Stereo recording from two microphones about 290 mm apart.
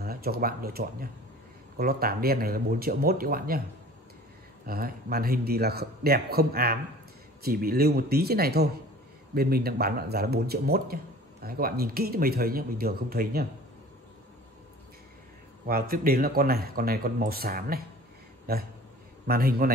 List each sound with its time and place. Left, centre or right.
0.0 s speech: right
4.6 s speech: right
15.6 s speech: right
18.5 s a sound: right
19.2 s speech: right